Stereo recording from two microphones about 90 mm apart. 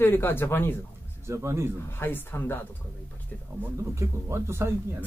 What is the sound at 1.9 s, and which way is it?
Speech, 20° left (ahead or behind).